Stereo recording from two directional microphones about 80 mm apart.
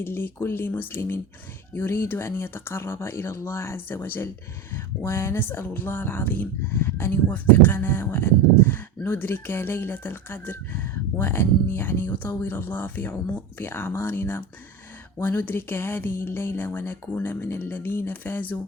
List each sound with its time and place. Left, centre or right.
0.0 s speech: left